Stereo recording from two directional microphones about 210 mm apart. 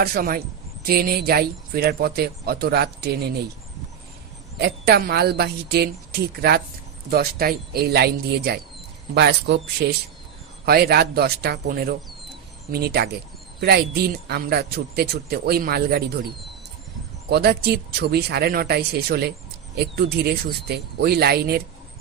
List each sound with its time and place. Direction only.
0.0 s speech: 45° right (ahead or behind)
4.6 s speech: 50° right (ahead or behind)
17.3 s speech: 50° right (ahead or behind)